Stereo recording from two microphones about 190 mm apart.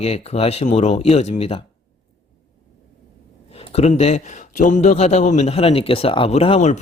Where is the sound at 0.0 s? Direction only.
35° left (ahead or behind).